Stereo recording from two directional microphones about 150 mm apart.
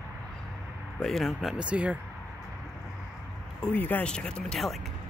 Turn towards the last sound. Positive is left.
turn(degrees=0)  # may be behind; listen again after turning